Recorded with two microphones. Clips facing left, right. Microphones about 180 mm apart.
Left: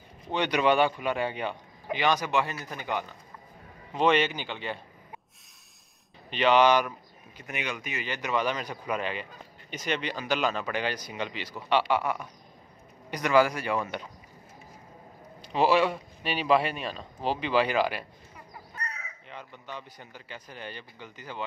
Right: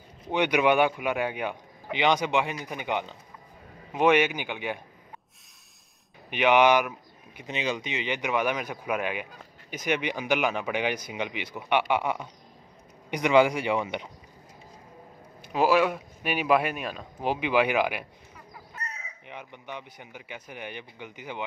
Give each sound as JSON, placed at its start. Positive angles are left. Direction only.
{"t": 0.3, "sound": "speech", "side_deg": -10}
{"t": 6.3, "sound": "speech", "side_deg": -15}
{"t": 7.4, "sound": "speech", "side_deg": -25}
{"t": 15.5, "sound": "speech", "side_deg": -5}